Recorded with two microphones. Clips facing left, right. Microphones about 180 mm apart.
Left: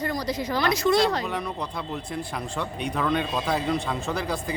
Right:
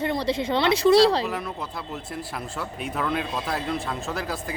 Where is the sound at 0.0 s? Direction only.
25° right (ahead or behind).